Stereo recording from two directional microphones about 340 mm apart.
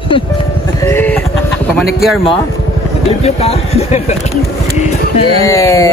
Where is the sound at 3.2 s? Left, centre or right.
Centre.